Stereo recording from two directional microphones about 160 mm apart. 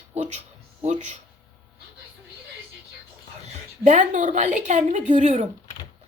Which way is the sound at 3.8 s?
50° right (ahead or behind).